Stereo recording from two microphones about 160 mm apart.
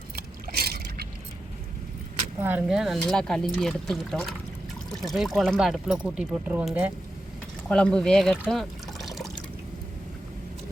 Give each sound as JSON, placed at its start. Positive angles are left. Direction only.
{"t": 0.2, "sound": "boat", "side_deg": -75}
{"t": 2.4, "sound": "speech", "side_deg": -10}
{"t": 7.7, "sound": "speech", "side_deg": 5}
{"t": 8.4, "sound": "liquid", "side_deg": 0}